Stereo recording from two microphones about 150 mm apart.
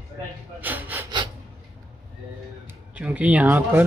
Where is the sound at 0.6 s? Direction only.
10° right (ahead or behind).